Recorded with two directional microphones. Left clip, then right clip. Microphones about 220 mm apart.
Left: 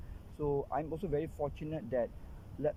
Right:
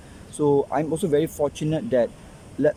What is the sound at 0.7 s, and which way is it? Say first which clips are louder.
Speech: right 13 dB; 15° right (ahead or behind).